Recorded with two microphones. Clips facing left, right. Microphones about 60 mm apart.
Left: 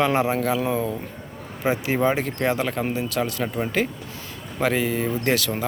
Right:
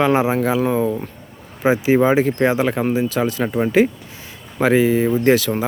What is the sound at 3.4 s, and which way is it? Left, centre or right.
Speech, centre.